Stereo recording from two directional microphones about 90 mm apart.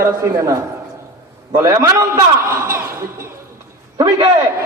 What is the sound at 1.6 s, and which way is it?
Speech, 35° right (ahead or behind).